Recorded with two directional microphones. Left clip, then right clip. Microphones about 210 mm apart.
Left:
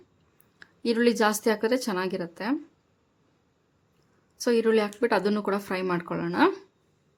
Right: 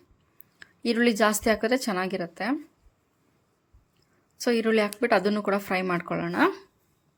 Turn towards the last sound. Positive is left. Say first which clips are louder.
# left 1 dB
turn(degrees=0)  # may be behind; listen again after turning